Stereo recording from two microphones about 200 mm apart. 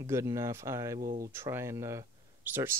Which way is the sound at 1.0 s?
45° right (ahead or behind).